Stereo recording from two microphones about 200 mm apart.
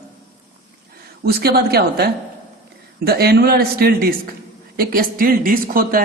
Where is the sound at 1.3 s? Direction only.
50° right (ahead or behind).